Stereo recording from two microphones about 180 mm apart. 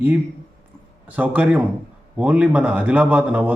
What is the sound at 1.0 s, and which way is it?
A man's voice, 10° right (ahead or behind).